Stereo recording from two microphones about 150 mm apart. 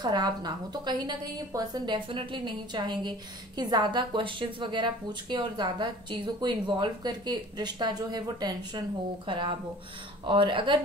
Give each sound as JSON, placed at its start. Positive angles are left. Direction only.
{"t": 0.0, "sound": "a woman's voice", "side_deg": -30}